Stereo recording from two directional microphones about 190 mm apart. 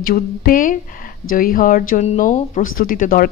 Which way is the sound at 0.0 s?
50° left (ahead or behind).